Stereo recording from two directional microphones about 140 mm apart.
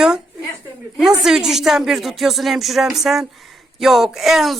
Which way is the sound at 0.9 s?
5° right (ahead or behind).